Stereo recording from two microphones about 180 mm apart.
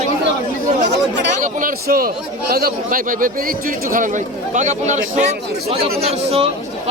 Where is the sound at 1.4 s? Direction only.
50° right (ahead or behind).